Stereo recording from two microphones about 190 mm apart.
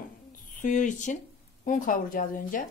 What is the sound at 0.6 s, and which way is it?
A woman's voice, 40° left (ahead or behind).